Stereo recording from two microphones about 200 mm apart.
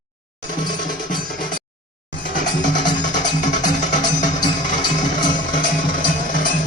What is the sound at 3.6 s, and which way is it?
Music, 40° left (ahead or behind).